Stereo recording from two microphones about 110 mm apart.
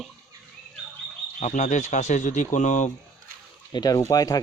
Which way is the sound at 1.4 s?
90° left.